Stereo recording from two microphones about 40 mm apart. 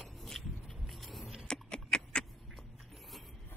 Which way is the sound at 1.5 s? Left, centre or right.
Left.